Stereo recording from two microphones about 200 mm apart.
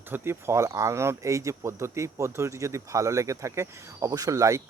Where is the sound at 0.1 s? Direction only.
10° right (ahead or behind).